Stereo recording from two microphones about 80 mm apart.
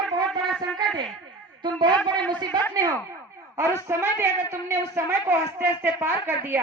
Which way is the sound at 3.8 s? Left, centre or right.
Right.